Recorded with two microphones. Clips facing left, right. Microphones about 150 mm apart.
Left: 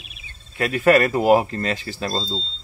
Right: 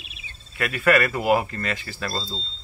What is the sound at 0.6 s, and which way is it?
Speech, 30° left (ahead or behind).